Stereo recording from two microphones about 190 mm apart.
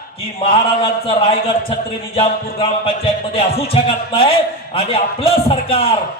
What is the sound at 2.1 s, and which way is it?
Music, 30° left (ahead or behind).